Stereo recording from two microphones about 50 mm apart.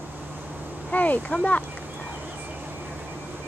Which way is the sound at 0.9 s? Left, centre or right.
Left.